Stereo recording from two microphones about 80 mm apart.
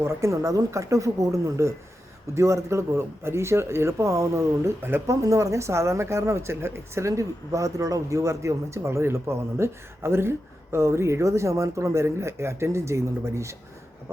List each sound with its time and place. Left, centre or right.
0.0 s speech: right
5.0 s speech: right